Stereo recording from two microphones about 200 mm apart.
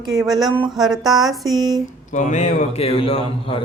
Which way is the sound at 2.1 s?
35° left (ahead or behind).